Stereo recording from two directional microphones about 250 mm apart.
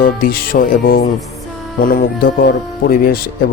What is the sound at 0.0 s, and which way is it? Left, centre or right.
A man's voice, left.